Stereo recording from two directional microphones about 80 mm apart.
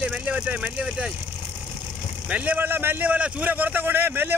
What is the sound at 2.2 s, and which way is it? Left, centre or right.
A man's voice, centre.